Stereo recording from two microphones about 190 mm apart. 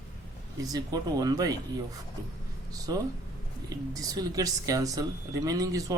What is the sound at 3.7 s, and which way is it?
Speech, 20° right (ahead or behind).